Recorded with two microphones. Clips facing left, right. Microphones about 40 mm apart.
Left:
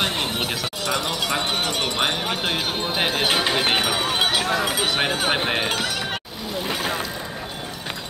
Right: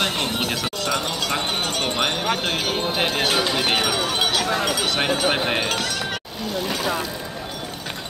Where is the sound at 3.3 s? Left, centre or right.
Left.